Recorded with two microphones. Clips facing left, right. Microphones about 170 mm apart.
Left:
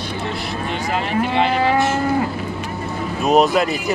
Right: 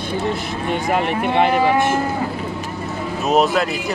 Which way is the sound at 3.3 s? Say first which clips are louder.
Left 2 dB; centre (ahead or behind).